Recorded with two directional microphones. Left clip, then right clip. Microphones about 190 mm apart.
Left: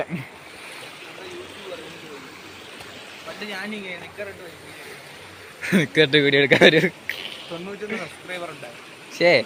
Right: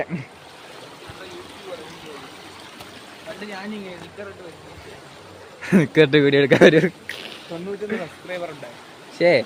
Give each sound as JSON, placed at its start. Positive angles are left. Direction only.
{"t": 5.6, "sound": "speech", "side_deg": -25}
{"t": 7.8, "sound": "speech", "side_deg": -50}
{"t": 9.1, "sound": "speech", "side_deg": -15}